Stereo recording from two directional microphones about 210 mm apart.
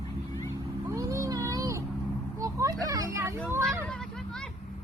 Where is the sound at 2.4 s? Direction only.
15° right (ahead or behind).